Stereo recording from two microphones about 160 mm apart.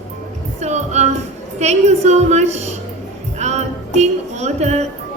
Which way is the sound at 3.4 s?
45° right (ahead or behind).